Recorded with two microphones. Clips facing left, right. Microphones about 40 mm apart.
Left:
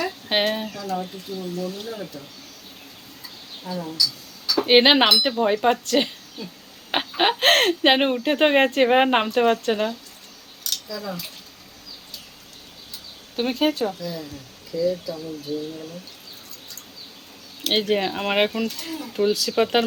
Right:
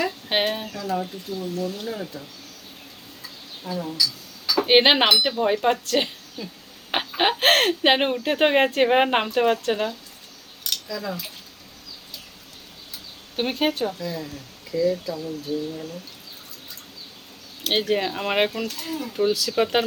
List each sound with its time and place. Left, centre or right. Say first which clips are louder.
0.0 s speech: left 1 dB; centre
3.6 s speech: even; centre
6.9 s a sound: left 1 dB; centre
8.1 s a woman's voice: left 1 dB; centre
13.3 s speech: left 2 dB; centre
17.7 s a woman's voice: left 1 dB; centre
18.5 s a woman's voice: left 1 dB; centre